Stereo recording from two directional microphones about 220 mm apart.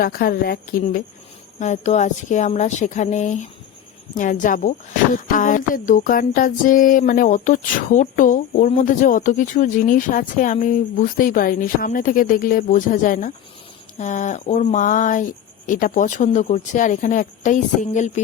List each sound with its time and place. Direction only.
0.0 s music: 40° left (ahead or behind)